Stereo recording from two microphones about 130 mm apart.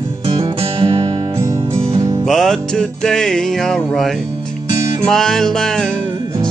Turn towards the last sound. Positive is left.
turn(degrees=5)  # may be behind; listen again after turning